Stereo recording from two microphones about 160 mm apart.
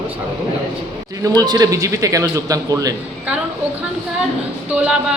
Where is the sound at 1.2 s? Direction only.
25° right (ahead or behind).